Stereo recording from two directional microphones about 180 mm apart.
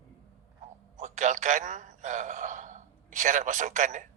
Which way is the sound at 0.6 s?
45° right (ahead or behind).